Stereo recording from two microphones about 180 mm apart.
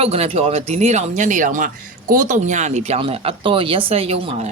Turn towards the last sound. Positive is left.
turn(degrees=-35)  # may be behind; listen again after turning